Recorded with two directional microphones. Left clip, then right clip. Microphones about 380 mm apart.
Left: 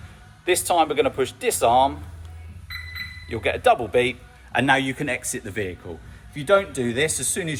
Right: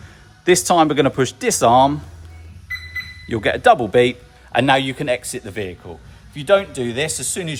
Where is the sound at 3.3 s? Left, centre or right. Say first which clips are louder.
Right 5 dB; right.